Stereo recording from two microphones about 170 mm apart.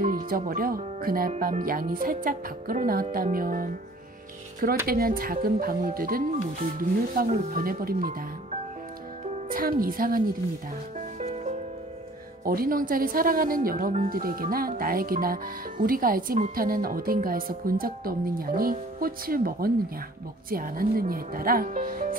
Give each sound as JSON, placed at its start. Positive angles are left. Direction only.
{"t": 0.0, "sound": "speech", "side_deg": -55}
{"t": 4.8, "sound": "speech", "side_deg": -60}
{"t": 9.5, "sound": "speech", "side_deg": -55}
{"t": 11.1, "sound": "music", "side_deg": -40}
{"t": 12.4, "sound": "speech", "side_deg": -60}